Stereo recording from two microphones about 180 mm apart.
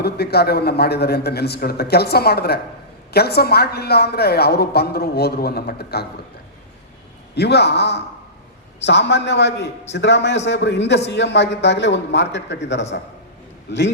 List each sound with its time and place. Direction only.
0.0 s a woman's voice: 65° left (ahead or behind)
7.3 s a man's voice: 70° left (ahead or behind)